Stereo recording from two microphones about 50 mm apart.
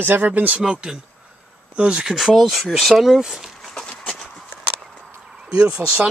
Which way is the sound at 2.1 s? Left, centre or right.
Centre.